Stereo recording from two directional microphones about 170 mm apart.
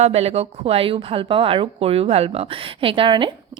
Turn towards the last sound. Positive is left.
turn(degrees=-30)  # may be behind; listen again after turning